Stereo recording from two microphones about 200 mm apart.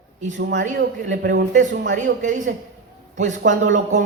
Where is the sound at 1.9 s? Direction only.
40° right (ahead or behind).